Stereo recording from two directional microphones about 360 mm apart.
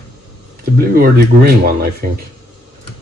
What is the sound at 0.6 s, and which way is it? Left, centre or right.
Speech, right.